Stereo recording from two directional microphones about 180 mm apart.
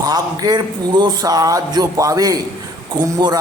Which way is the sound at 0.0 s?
20° right (ahead or behind).